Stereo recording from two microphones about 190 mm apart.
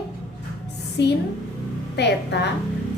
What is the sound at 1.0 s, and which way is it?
A woman's voice, 65° left (ahead or behind).